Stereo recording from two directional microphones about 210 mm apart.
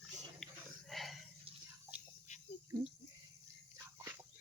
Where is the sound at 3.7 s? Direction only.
15° right (ahead or behind).